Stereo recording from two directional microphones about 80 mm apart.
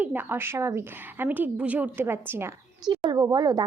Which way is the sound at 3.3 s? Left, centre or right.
Right.